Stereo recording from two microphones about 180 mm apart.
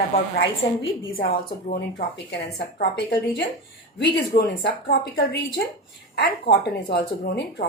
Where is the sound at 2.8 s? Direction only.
65° left (ahead or behind).